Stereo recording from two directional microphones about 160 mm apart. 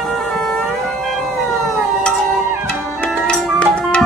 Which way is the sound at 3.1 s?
5° left (ahead or behind).